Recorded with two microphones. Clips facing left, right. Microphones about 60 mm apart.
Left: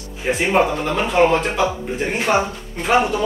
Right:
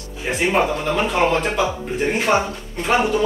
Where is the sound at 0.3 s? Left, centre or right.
Centre.